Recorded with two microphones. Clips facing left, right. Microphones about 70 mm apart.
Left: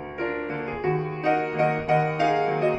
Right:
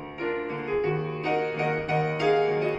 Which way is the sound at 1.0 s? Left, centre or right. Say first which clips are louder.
Left 3 dB; left.